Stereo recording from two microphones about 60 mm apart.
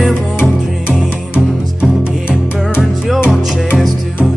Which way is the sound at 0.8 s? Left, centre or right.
Centre.